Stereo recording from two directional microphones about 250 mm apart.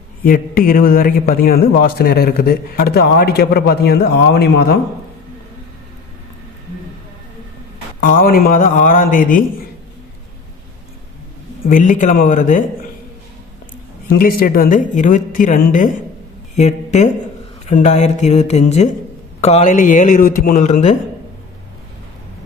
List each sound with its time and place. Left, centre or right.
0.3 s a man's voice: left
8.0 s a man's voice: left
11.6 s a man's voice: left
14.1 s a man's voice: left